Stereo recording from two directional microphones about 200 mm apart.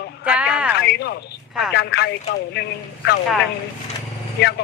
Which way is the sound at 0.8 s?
55° left (ahead or behind).